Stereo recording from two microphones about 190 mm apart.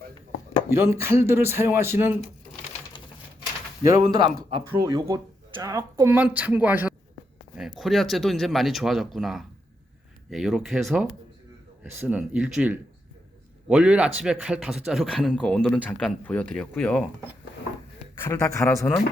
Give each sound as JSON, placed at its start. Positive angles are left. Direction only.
{"t": 0.7, "sound": "speech", "side_deg": -15}
{"t": 3.8, "sound": "speech", "side_deg": -20}
{"t": 4.3, "sound": "speech", "side_deg": -30}
{"t": 4.8, "sound": "speech", "side_deg": -20}
{"t": 18.1, "sound": "a man's voice", "side_deg": 15}